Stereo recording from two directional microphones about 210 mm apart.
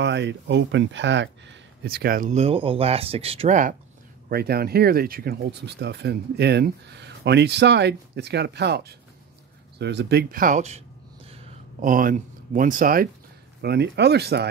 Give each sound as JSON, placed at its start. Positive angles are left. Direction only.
{"t": 0.0, "sound": "speech", "side_deg": -55}
{"t": 4.3, "sound": "speech", "side_deg": -50}
{"t": 11.8, "sound": "speech", "side_deg": -40}